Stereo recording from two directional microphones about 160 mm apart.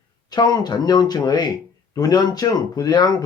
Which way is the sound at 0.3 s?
25° left (ahead or behind).